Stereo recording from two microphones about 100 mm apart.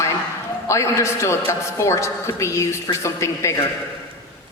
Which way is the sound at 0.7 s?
30° left (ahead or behind).